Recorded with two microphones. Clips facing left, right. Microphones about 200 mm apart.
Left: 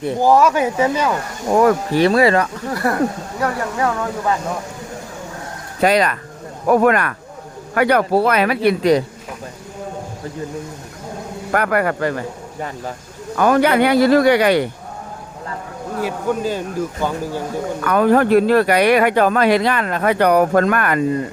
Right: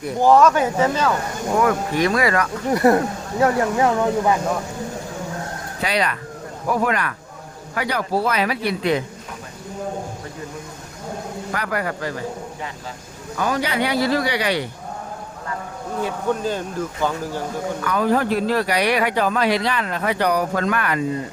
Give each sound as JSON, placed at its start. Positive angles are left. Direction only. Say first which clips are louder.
{"t": 0.2, "sound": "speech", "louder": "even", "side_deg": 10}
{"t": 1.6, "sound": "speech", "louder": "left 6 dB", "side_deg": 30}
{"t": 2.6, "sound": "speech", "louder": "right 3 dB", "side_deg": -20}
{"t": 5.8, "sound": "speech", "louder": "left 7 dB", "side_deg": 45}
{"t": 8.8, "sound": "speech", "louder": "left 5 dB", "side_deg": 40}
{"t": 11.5, "sound": "speech", "louder": "left 8 dB", "side_deg": 60}
{"t": 13.3, "sound": "speech", "louder": "left 8 dB", "side_deg": 55}
{"t": 16.0, "sound": "speech", "louder": "left 2 dB", "side_deg": 5}
{"t": 17.8, "sound": "speech", "louder": "left 6 dB", "side_deg": 60}